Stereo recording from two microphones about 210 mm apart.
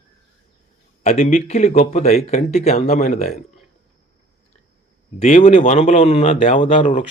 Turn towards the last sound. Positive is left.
turn(degrees=25)  # may be behind; listen again after turning